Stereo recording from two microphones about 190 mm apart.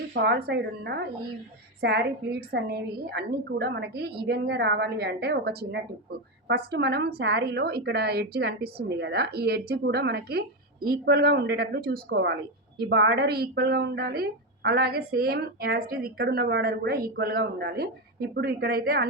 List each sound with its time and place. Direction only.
0.1 s a woman's voice: 60° right (ahead or behind)